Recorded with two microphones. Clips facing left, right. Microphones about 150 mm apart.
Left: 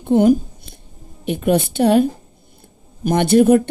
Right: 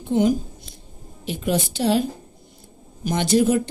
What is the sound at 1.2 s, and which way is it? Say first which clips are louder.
Speech: left 6 dB; 55° left (ahead or behind).